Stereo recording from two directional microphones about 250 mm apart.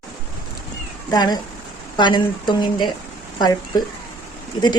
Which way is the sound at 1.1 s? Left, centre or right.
Centre.